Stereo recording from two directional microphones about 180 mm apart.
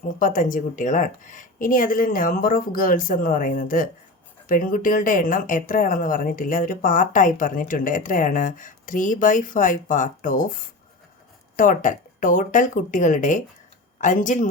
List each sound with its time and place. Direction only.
0.0 s a woman's voice: 50° left (ahead or behind)
11.5 s a woman's voice: 45° left (ahead or behind)